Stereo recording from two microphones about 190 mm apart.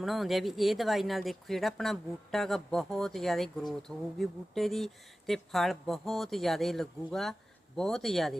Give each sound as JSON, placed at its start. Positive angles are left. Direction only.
{"t": 0.0, "sound": "speech", "side_deg": 0}